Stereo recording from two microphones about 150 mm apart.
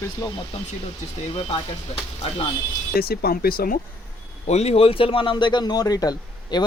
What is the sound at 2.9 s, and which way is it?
Speech, 90° left.